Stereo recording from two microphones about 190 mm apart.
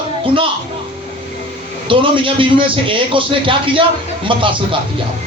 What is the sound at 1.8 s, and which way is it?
A man's voice, 25° right (ahead or behind).